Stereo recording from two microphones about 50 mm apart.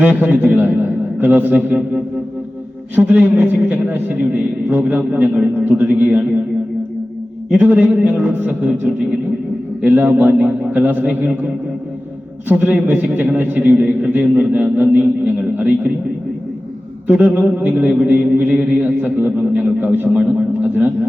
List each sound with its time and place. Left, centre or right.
0.0 s a man's voice: right
7.6 s a man's voice: right
9.9 s a man's voice: right
12.5 s a man's voice: right
17.1 s a man's voice: right